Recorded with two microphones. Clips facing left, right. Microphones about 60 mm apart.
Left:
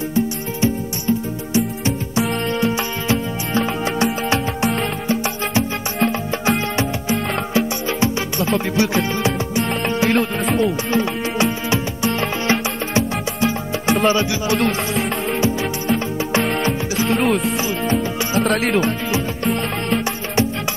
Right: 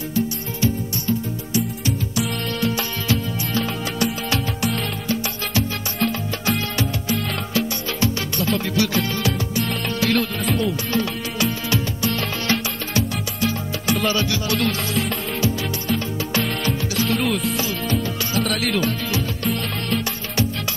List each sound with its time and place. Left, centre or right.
1.5 s music: left
6.8 s music: left
18.6 s music: left
19.4 s music: centre